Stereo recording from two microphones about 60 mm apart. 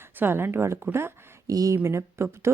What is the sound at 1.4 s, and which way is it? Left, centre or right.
Speech, right.